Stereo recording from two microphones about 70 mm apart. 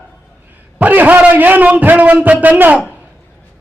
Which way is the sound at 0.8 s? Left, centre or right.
Right.